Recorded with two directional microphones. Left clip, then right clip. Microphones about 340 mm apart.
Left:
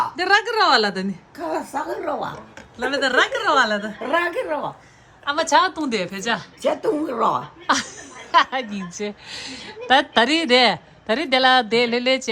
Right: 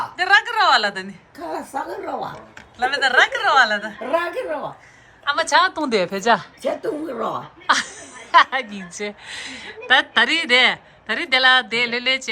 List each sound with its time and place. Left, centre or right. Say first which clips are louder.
0.2 s a woman's voice: right 3 dB; centre
1.4 s a woman's voice: left 1 dB; centre
2.7 s a woman's voice: right 2 dB; centre
4.1 s a woman's voice: left 1 dB; centre
5.2 s a woman's voice: right 1 dB; centre